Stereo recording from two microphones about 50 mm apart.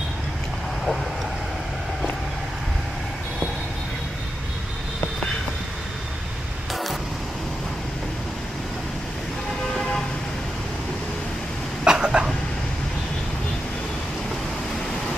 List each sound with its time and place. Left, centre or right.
6.7 s vehicle: centre
11.8 s cough: centre